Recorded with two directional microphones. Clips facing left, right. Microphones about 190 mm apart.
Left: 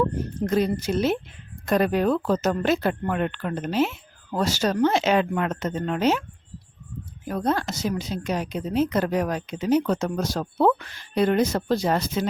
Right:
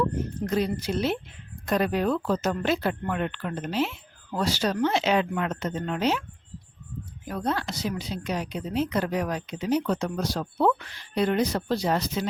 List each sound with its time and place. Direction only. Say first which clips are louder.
0.0 s a woman's voice: left 3 dB; 45° left (ahead or behind)
7.3 s a woman's voice: left 4 dB; 45° left (ahead or behind)